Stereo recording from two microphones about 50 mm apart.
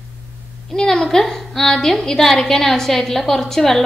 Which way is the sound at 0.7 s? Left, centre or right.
Centre.